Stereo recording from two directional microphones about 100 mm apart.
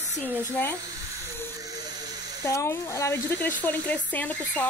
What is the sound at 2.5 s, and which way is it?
Speech, 30° left (ahead or behind).